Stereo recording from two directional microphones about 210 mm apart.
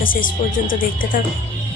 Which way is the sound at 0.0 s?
40° left (ahead or behind).